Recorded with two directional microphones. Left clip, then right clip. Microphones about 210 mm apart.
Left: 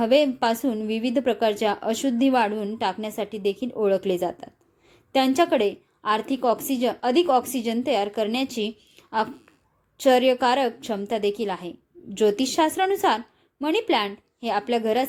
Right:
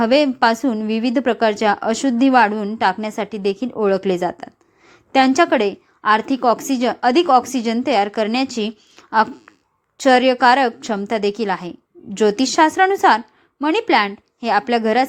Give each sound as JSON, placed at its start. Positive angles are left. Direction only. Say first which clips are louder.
{"t": 0.0, "sound": "a woman's voice", "louder": "right 5 dB", "side_deg": -20}